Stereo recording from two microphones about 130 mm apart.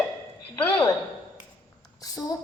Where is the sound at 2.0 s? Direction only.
30° left (ahead or behind).